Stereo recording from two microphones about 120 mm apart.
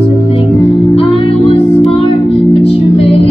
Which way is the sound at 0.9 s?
50° left (ahead or behind).